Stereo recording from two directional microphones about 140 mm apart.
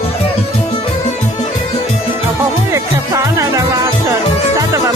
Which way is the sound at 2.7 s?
20° right (ahead or behind).